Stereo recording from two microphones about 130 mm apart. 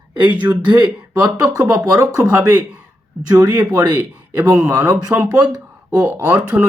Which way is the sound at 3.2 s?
30° right (ahead or behind).